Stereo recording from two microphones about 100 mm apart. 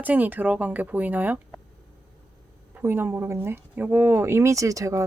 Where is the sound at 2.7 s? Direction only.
20° right (ahead or behind).